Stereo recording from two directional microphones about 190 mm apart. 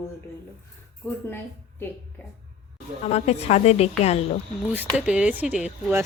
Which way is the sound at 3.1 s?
35° left (ahead or behind).